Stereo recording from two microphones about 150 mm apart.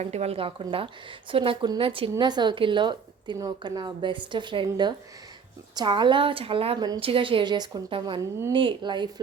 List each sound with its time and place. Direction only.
0.0 s speech: 45° right (ahead or behind); by 9.2 s 30° right (ahead or behind)